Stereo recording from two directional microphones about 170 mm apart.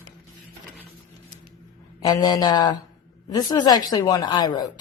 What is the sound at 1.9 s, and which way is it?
A woman's voice, 20° left (ahead or behind).